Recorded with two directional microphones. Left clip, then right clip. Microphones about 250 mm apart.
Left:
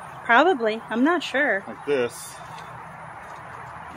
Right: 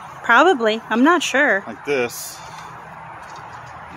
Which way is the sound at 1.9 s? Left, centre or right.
Right.